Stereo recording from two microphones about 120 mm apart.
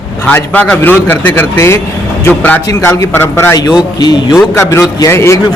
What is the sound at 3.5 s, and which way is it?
A man's voice, 35° left (ahead or behind).